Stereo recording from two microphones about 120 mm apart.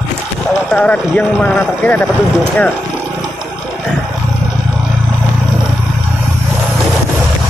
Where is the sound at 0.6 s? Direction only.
10° left (ahead or behind).